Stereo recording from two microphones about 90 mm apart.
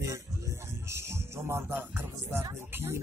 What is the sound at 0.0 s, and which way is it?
Music, 35° right (ahead or behind).